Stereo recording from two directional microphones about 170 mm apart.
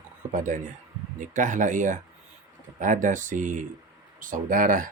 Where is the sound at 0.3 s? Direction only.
50° right (ahead or behind).